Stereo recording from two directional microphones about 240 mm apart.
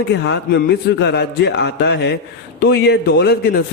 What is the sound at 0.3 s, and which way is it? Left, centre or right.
A man's voice, left.